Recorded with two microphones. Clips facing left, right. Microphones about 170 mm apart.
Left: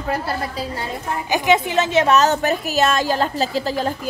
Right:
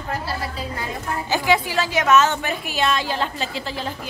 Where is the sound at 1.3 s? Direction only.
20° left (ahead or behind).